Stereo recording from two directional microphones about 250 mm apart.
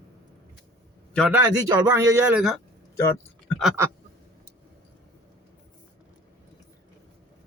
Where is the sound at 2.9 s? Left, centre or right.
Centre.